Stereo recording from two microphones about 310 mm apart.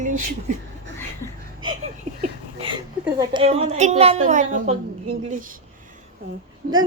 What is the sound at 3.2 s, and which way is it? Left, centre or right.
A woman's voice, centre.